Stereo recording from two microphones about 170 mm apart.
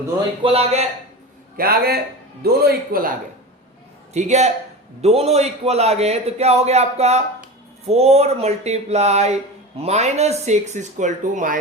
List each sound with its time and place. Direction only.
0.4 s speech: 40° right (ahead or behind)
1.5 s a man's voice: 60° right (ahead or behind)
4.1 s speech: 40° right (ahead or behind)